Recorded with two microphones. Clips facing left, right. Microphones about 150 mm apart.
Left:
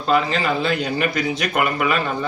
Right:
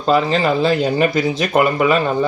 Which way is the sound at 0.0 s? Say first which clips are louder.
Right 4 dB; 35° right (ahead or behind).